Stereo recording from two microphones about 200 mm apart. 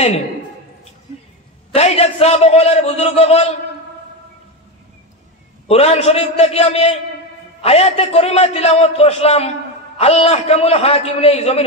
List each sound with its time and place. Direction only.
1.7 s a man's voice: 30° left (ahead or behind)
5.7 s a man's voice: 30° left (ahead or behind)